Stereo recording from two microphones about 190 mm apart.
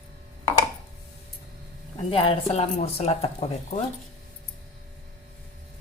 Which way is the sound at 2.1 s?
30° left (ahead or behind).